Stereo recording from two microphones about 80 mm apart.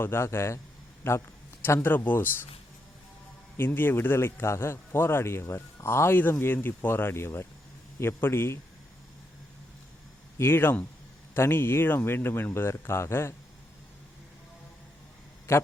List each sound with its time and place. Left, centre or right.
0.0 s a man's voice: left
3.6 s a man's voice: left
10.3 s speech: left
15.5 s speech: left